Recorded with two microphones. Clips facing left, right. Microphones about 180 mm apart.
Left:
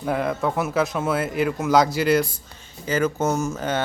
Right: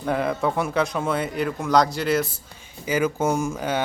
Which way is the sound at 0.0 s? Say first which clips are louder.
Even; centre (ahead or behind).